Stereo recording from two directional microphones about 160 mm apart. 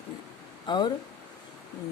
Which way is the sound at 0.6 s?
25° left (ahead or behind).